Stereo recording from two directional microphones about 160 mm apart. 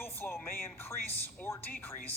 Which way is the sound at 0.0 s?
15° left (ahead or behind).